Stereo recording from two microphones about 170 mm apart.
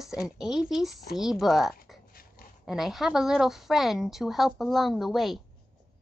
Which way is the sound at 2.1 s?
60° left (ahead or behind).